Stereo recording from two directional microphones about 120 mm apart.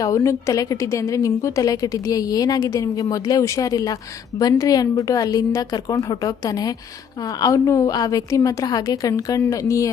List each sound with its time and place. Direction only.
0.0 s a woman's voice: 30° left (ahead or behind)